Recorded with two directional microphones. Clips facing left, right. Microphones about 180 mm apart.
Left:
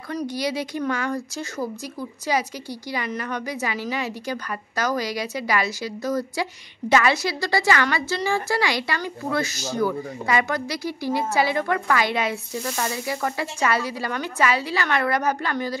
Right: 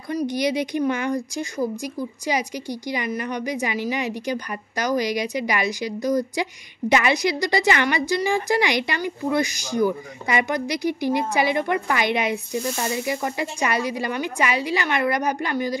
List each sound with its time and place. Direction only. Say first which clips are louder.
0.1 s a woman's voice: right 4 dB; 15° right (ahead or behind)